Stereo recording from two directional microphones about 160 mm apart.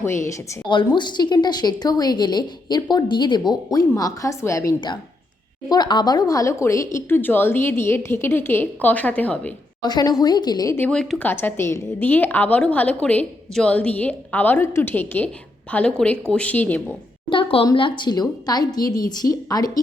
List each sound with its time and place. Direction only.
0.0 s a woman's voice: 15° left (ahead or behind)
0.7 s a woman's voice: 30° left (ahead or behind); by 9.5 s 10° left (ahead or behind)
9.8 s a woman's voice: 25° left (ahead or behind)
17.2 s a woman's voice: 35° left (ahead or behind)